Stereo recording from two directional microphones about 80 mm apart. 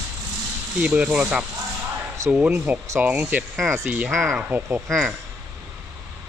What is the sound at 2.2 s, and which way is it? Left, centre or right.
Speech, right.